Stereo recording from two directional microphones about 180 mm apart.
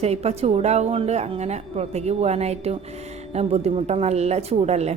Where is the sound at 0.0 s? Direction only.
35° right (ahead or behind).